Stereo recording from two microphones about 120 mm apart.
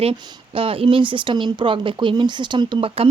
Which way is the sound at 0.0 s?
50° right (ahead or behind).